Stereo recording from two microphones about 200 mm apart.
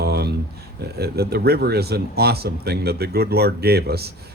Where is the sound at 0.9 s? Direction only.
50° right (ahead or behind).